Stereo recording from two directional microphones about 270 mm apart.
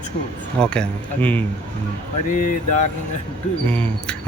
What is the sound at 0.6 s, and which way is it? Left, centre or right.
Speech, centre.